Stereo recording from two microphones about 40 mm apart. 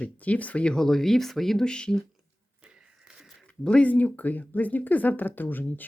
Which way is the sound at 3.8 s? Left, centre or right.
Left.